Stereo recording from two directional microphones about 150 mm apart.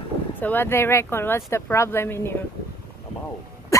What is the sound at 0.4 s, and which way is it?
Speech, 15° left (ahead or behind).